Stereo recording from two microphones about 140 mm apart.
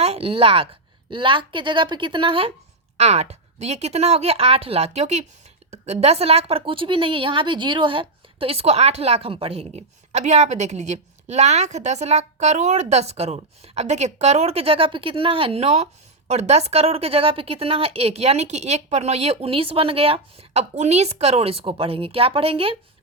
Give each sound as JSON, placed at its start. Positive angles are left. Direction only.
{"t": 0.0, "sound": "a woman's voice", "side_deg": -45}
{"t": 3.0, "sound": "a woman's voice", "side_deg": -50}